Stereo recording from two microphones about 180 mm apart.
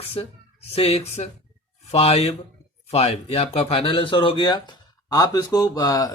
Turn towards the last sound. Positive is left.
turn(degrees=20)  # may be behind; listen again after turning